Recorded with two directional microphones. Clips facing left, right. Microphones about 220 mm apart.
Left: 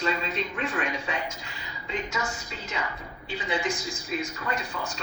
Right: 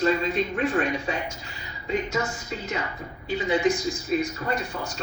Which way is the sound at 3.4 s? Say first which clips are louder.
Right 7 dB; 40° right (ahead or behind).